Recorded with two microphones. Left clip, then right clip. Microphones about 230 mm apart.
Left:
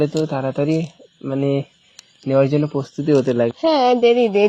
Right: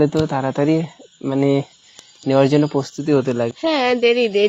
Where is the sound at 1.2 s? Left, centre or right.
Right.